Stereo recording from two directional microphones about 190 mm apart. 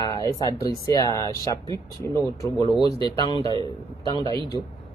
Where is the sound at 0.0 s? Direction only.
20° left (ahead or behind).